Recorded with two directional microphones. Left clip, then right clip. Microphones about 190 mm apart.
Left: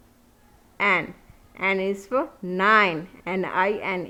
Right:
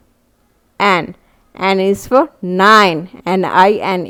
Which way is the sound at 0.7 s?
50° right (ahead or behind).